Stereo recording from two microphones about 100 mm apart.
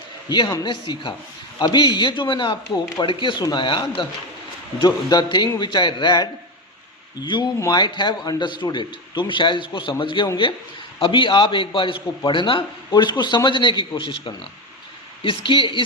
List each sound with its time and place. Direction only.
0.3 s a man's voice: 50° left (ahead or behind)
4.9 s a man's voice: 45° left (ahead or behind)